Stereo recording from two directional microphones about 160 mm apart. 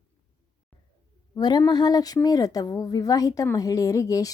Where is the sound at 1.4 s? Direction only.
25° left (ahead or behind).